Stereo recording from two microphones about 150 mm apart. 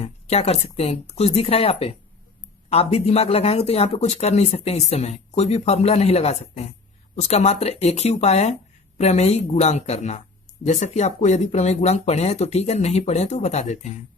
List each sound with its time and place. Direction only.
0.0 s speech: 45° left (ahead or behind)